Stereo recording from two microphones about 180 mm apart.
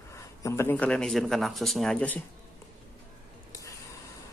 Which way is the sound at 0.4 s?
15° left (ahead or behind).